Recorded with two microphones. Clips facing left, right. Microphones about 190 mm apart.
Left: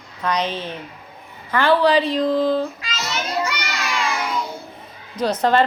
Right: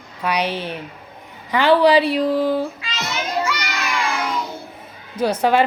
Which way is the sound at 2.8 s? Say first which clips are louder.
Right 1 dB; 40° left (ahead or behind).